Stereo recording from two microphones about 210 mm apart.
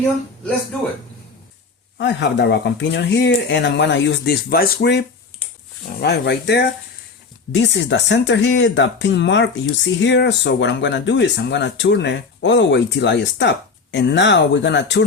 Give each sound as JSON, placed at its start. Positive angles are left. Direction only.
{"t": 2.0, "sound": "speech", "side_deg": 55}